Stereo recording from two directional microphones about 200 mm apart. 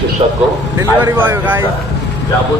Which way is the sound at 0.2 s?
30° right (ahead or behind).